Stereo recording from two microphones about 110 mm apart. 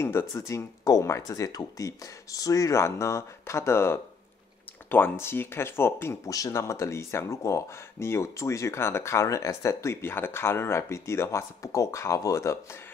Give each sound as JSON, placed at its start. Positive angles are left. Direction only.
{"t": 0.0, "sound": "speech", "side_deg": 20}